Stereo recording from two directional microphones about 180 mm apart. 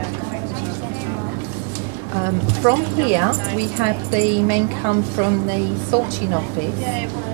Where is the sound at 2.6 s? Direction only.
20° right (ahead or behind).